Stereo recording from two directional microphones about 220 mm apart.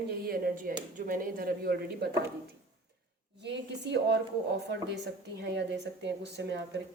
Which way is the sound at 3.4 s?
50° right (ahead or behind).